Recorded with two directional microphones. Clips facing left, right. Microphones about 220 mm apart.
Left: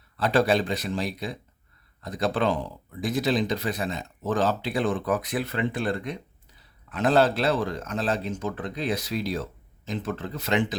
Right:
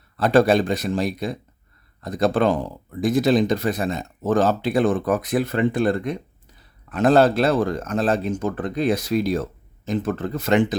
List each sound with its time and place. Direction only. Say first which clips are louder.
0.2 s speech: right 6 dB; 45° right (ahead or behind)